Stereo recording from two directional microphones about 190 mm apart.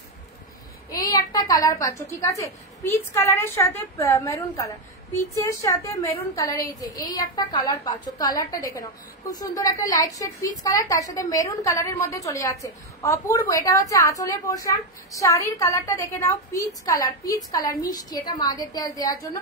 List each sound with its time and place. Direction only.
0.9 s a woman's voice: 20° left (ahead or behind)